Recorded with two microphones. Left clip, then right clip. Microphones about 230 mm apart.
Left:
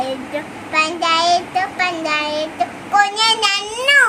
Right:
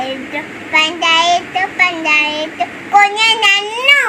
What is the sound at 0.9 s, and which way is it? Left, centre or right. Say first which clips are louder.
Child singing: right 4 dB; left.